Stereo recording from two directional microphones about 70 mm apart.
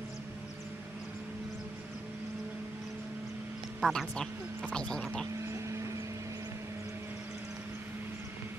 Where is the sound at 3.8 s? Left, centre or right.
Centre.